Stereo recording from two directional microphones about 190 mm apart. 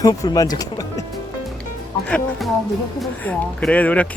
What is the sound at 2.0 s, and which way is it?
Speech, 5° left (ahead or behind).